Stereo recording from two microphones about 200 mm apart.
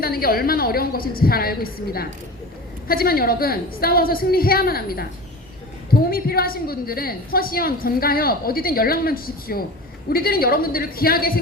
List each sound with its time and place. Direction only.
0.0 s a woman's voice: 50° left (ahead or behind)